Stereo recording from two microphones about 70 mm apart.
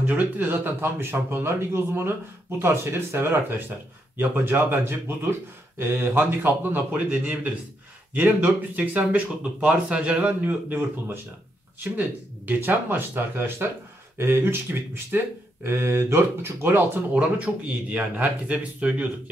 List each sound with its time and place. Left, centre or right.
0.0 s speech: right